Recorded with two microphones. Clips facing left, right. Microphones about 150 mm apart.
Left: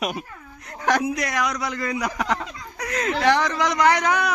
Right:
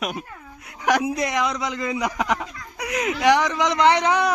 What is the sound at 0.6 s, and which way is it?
Speech, 15° right (ahead or behind).